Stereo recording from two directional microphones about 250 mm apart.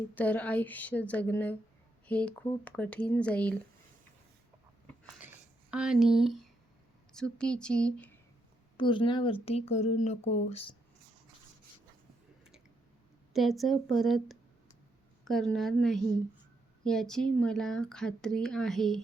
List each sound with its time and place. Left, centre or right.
0.1 s a woman's voice: centre
5.7 s speech: centre
8.8 s speech: centre
13.3 s speech: centre